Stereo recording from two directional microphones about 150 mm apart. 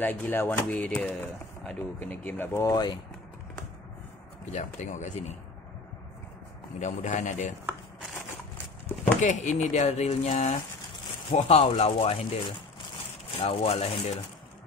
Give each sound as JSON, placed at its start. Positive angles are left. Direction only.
{"t": 0.0, "sound": "speech", "side_deg": 10}
{"t": 4.5, "sound": "speech", "side_deg": 50}
{"t": 6.8, "sound": "speech", "side_deg": 55}
{"t": 9.2, "sound": "speech", "side_deg": 55}
{"t": 13.4, "sound": "speech", "side_deg": 40}